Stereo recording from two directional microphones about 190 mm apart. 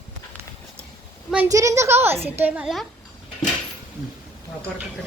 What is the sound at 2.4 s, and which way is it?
Child singing, 5° right (ahead or behind).